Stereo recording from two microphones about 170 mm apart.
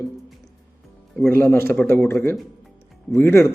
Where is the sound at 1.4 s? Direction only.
15° left (ahead or behind).